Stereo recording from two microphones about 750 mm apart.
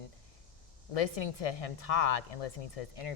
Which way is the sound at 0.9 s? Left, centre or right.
Left.